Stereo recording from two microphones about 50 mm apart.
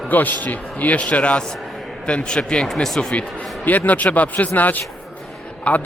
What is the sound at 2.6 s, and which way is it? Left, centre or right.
Speech, centre.